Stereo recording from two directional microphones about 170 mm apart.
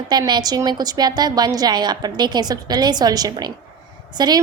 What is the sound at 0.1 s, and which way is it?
A woman's voice, 25° right (ahead or behind).